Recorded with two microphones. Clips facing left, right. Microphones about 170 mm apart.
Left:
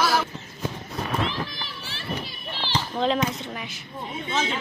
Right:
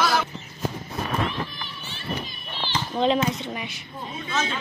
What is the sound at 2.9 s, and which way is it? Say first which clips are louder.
Speech: right 3 dB; 5° right (ahead or behind).